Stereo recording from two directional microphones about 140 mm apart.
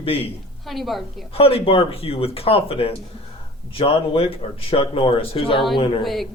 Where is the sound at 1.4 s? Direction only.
45° left (ahead or behind).